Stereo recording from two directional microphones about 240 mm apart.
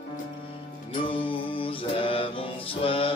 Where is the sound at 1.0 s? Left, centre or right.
Left.